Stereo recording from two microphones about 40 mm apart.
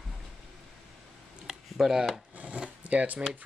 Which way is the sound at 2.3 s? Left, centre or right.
Right.